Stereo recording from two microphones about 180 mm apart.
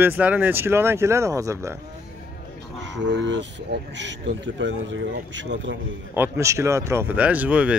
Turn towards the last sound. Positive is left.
turn(degrees=-10)  # may be behind; listen again after turning